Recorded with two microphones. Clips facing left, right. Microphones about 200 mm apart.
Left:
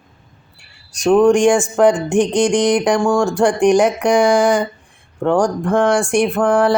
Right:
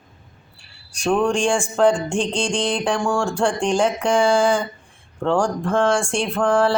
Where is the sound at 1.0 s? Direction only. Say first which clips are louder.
Left 8 dB; 20° left (ahead or behind).